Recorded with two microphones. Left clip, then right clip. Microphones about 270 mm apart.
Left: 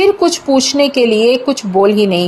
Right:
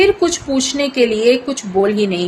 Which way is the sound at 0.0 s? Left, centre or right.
Centre.